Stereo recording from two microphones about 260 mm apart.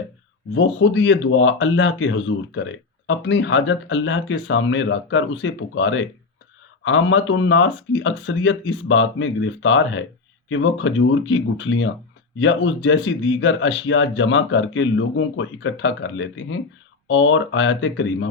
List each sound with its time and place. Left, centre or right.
0.5 s speech: left